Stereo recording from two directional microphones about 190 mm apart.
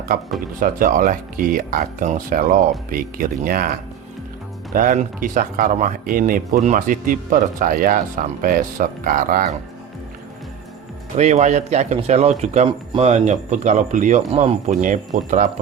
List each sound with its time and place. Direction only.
0.6 s speech: 45° right (ahead or behind)
11.2 s speech: 35° right (ahead or behind)